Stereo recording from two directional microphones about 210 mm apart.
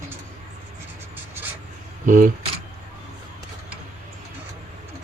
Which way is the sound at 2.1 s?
40° right (ahead or behind).